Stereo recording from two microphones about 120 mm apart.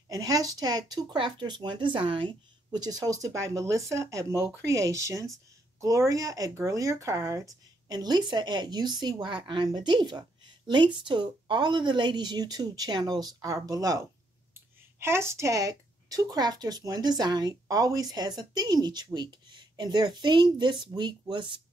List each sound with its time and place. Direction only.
0.1 s speech: 30° right (ahead or behind)
7.9 s speech: 35° right (ahead or behind)